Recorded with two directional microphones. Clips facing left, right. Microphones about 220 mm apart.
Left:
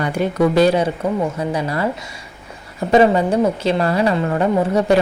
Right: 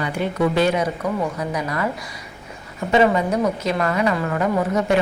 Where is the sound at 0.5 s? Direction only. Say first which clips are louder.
Left 5 dB; 35° left (ahead or behind).